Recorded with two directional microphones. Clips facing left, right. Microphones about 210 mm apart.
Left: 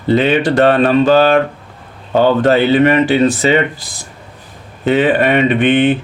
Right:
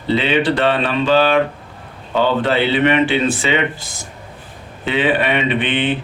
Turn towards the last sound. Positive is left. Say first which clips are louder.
# left 7 dB
turn(degrees=45)  # may be behind; listen again after turning